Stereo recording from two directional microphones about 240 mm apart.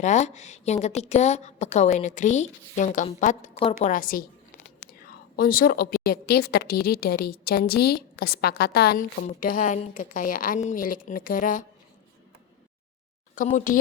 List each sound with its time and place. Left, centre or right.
0.0 s a woman's voice: left
5.4 s a woman's voice: left
13.3 s a woman's voice: left